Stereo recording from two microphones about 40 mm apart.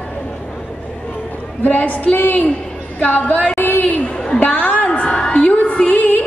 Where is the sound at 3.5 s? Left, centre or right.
Left.